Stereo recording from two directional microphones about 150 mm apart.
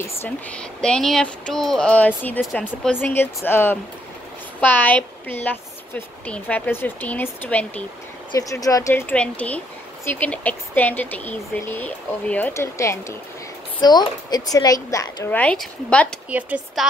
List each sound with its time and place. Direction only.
0.0 s speech: 10° left (ahead or behind)
8.3 s speech: 25° left (ahead or behind)
15.3 s speech: 5° left (ahead or behind)
16.3 s speech: 10° right (ahead or behind)